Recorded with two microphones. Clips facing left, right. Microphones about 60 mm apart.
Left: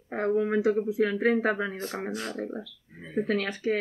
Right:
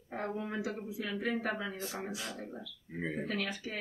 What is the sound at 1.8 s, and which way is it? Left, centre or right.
Speech, left.